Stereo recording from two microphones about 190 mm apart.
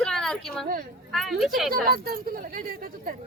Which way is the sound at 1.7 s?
50° right (ahead or behind).